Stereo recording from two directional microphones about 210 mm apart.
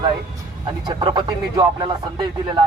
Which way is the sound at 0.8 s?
20° right (ahead or behind).